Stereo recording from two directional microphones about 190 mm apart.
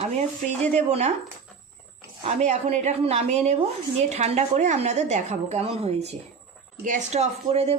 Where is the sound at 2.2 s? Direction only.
40° right (ahead or behind).